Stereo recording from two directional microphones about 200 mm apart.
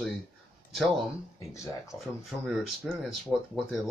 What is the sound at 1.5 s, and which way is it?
Speech, 15° left (ahead or behind).